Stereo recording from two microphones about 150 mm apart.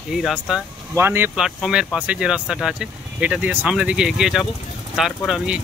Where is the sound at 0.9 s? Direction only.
15° right (ahead or behind).